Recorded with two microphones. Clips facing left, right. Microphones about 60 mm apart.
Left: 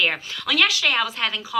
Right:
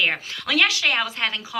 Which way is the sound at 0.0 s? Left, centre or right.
Right.